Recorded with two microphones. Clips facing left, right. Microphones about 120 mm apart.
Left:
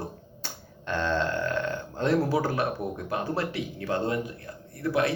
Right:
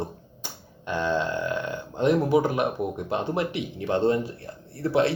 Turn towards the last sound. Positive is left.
turn(degrees=-30)  # may be behind; listen again after turning